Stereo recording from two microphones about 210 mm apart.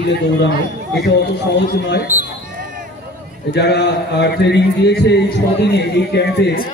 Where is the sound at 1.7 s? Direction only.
50° left (ahead or behind).